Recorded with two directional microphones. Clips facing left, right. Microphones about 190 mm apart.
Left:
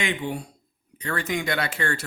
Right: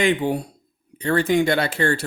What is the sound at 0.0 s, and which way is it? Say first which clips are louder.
Speech: right 8 dB; 35° right (ahead or behind).